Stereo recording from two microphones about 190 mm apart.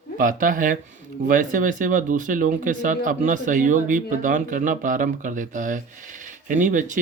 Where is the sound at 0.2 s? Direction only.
45° right (ahead or behind).